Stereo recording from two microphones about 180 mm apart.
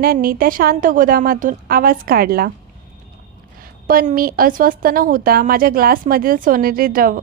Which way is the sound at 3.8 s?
55° right (ahead or behind).